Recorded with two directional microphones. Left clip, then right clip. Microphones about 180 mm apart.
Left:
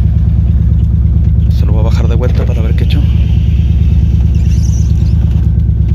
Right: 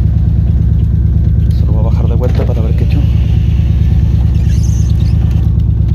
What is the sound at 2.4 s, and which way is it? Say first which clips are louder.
Vehicle: right 1 dB; 10° right (ahead or behind).